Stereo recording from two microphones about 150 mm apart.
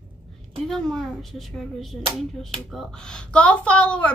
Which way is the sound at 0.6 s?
5° left (ahead or behind).